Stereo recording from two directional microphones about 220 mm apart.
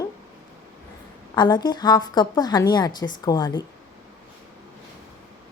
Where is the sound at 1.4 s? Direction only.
20° left (ahead or behind).